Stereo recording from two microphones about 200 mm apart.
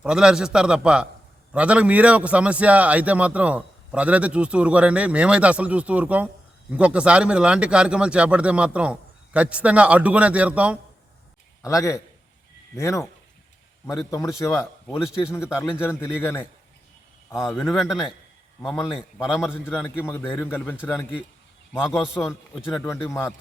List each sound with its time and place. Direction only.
0.0 s a man's voice: 5° right (ahead or behind)
11.6 s a man's voice: 15° left (ahead or behind); by 19.5 s 5° right (ahead or behind)
19.5 s a man's voice: 5° left (ahead or behind)